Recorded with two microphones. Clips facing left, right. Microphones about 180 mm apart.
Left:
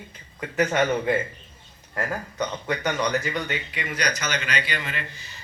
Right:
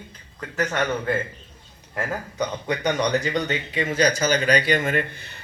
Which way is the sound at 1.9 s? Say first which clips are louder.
Right 1 dB; 15° right (ahead or behind).